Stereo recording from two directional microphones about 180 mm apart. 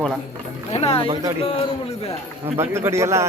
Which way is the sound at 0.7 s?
35° left (ahead or behind).